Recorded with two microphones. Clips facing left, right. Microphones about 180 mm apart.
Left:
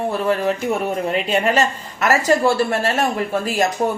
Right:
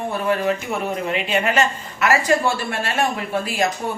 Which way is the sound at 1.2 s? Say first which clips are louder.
Left 1 dB; 40° left (ahead or behind).